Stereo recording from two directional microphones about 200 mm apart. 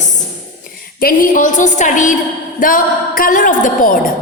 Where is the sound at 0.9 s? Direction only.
45° left (ahead or behind).